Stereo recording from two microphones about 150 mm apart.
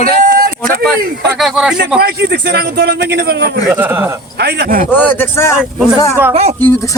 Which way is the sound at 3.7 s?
15° right (ahead or behind).